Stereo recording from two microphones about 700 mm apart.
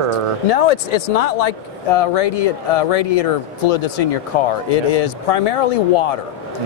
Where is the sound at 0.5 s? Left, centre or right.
Left.